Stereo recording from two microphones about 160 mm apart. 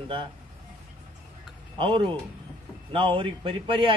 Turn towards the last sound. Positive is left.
turn(degrees=-35)  # may be behind; listen again after turning